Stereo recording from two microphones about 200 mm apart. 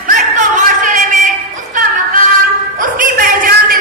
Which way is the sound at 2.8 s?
40° right (ahead or behind).